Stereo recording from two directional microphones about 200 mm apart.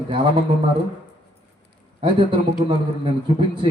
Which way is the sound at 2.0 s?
25° right (ahead or behind).